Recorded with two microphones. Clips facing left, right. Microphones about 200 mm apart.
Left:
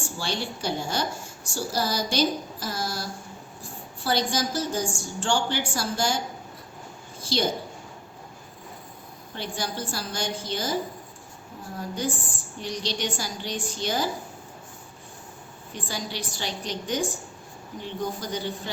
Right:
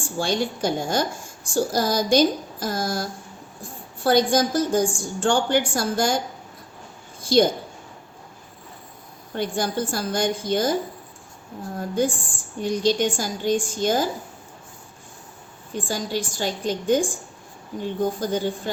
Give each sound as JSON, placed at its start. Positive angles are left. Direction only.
{"t": 0.2, "sound": "a woman's voice", "side_deg": -50}
{"t": 7.2, "sound": "a sound", "side_deg": -50}
{"t": 9.3, "sound": "a woman's voice", "side_deg": -50}
{"t": 11.8, "sound": "a woman's voice", "side_deg": -50}
{"t": 15.7, "sound": "a woman's voice", "side_deg": -45}